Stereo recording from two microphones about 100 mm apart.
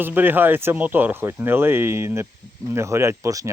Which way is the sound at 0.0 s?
20° right (ahead or behind).